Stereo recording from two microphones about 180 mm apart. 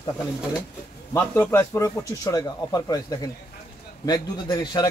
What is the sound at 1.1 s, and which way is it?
A man's voice, 15° left (ahead or behind).